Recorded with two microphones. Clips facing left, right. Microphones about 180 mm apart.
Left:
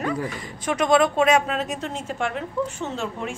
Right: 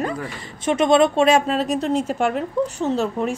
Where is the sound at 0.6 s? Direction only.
25° right (ahead or behind).